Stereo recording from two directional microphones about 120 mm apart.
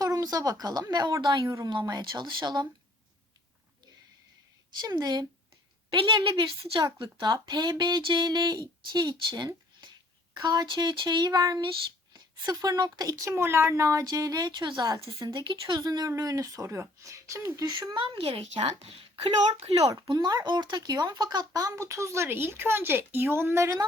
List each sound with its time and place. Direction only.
0.0 s a sound: 30° right (ahead or behind)
0.6 s speech: 35° right (ahead or behind)
1.5 s speech: 30° right (ahead or behind)
4.8 s speech: 35° right (ahead or behind); by 19.8 s 55° right (ahead or behind)
19.8 s speech: 30° right (ahead or behind)